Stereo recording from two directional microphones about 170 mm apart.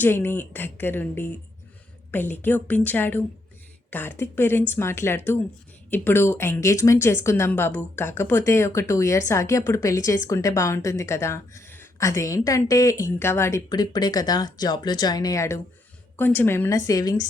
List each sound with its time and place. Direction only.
0.0 s a woman's voice: 15° left (ahead or behind)